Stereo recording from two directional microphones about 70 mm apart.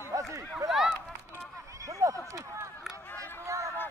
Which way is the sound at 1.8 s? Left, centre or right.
Right.